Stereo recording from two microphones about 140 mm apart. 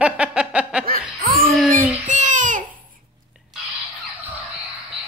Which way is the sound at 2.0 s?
60° right (ahead or behind).